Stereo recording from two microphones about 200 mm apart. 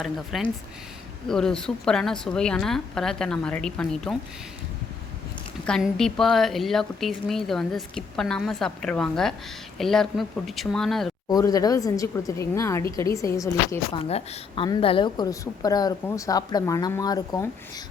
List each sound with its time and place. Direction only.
0.0 s a woman's voice: centre (ahead or behind)
5.6 s a woman's voice: 5° left (ahead or behind)
11.3 s a woman's voice: 20° left (ahead or behind)
14.0 s a woman's voice: 30° left (ahead or behind)